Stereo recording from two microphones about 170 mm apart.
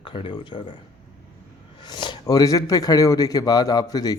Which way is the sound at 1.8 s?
25° left (ahead or behind).